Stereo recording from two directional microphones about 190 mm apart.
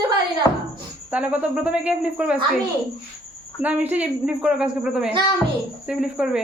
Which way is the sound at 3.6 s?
10° right (ahead or behind).